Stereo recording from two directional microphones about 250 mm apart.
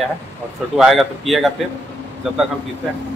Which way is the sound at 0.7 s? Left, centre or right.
Centre.